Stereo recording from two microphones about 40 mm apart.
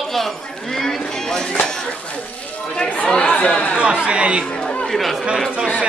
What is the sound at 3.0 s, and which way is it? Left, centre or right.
Chatter, centre.